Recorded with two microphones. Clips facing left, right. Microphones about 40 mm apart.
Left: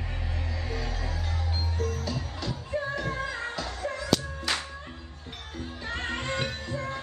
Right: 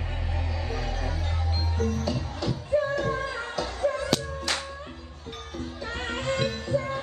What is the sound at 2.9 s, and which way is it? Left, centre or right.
Music, left.